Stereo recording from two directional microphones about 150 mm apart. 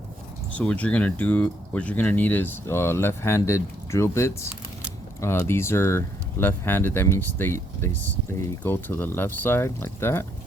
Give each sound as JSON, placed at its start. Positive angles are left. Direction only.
{"t": 0.5, "sound": "speech", "side_deg": 10}